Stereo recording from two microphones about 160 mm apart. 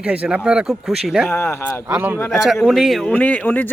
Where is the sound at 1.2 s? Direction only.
15° left (ahead or behind).